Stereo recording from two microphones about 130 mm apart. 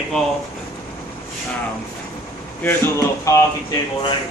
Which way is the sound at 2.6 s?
20° left (ahead or behind).